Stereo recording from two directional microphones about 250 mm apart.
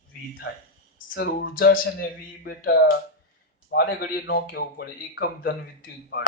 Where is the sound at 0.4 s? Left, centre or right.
Left.